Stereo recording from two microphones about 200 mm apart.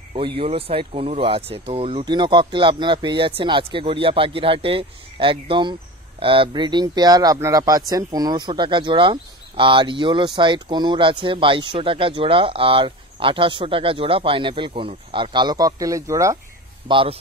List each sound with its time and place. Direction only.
0.4 s speech: 30° right (ahead or behind)
16.8 s speech: 25° right (ahead or behind)